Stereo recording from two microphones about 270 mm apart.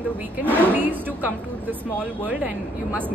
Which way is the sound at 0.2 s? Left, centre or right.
Centre.